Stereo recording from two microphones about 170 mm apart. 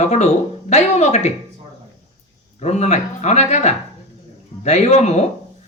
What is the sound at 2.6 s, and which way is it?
Speech, 40° left (ahead or behind).